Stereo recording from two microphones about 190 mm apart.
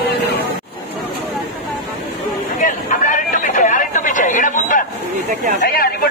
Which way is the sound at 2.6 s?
45° left (ahead or behind).